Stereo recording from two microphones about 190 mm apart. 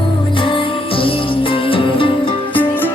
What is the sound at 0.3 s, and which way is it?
Music, 25° left (ahead or behind).